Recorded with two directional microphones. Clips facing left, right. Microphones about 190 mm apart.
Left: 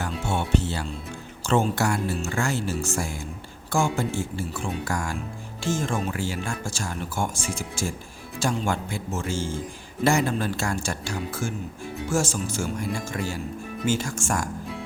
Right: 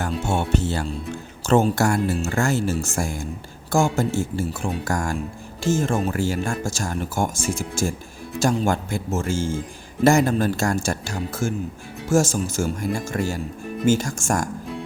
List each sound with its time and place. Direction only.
0.0 s speech: 45° right (ahead or behind)